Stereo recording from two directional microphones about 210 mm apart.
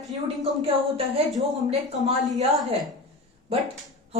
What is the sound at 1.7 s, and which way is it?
Speech, 30° right (ahead or behind).